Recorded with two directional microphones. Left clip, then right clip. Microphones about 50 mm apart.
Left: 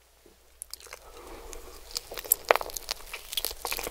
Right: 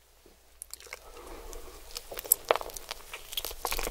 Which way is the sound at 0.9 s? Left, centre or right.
Centre.